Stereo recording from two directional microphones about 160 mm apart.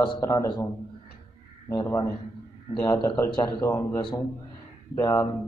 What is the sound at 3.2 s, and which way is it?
Speech, 30° left (ahead or behind).